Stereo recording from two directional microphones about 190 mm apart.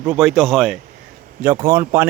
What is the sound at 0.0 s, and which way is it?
Speech, 5° right (ahead or behind).